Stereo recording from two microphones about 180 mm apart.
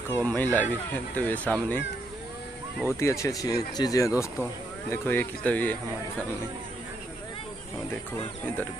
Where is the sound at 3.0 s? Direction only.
15° left (ahead or behind).